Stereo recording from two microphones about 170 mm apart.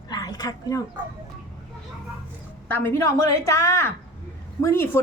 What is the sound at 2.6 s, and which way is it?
A woman's voice, 10° left (ahead or behind).